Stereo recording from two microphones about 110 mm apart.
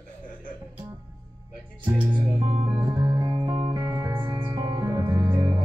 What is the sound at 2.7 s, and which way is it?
Music, 35° right (ahead or behind).